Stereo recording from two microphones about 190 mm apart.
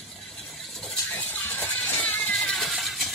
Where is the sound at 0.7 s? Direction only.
5° left (ahead or behind).